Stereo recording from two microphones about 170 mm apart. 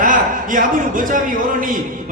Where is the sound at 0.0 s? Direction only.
50° right (ahead or behind).